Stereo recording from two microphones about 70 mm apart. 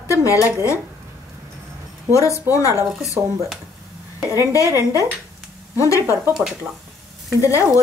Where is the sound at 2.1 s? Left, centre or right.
Left.